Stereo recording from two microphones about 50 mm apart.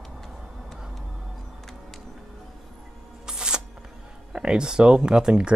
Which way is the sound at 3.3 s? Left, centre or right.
Centre.